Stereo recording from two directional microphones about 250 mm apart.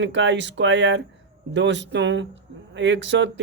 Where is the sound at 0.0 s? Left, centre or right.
Right.